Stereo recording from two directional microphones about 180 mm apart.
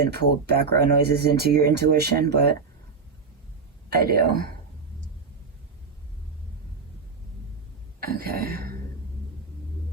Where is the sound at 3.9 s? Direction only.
60° right (ahead or behind).